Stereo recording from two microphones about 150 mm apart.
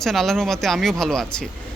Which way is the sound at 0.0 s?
Centre (ahead or behind).